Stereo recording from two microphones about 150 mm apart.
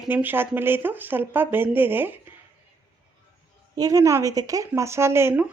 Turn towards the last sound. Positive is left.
turn(degrees=-15)  # may be behind; listen again after turning